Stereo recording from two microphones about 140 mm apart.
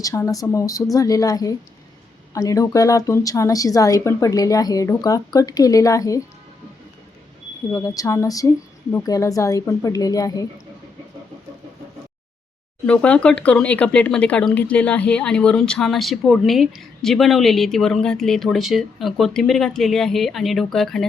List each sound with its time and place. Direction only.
0.0 s a woman's voice: 25° left (ahead or behind)
7.7 s a woman's voice: 25° left (ahead or behind)
12.8 s speech: 10° left (ahead or behind)